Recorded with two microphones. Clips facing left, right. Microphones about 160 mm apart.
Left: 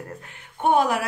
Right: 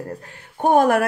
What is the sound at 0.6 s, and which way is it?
Speech, 50° right (ahead or behind).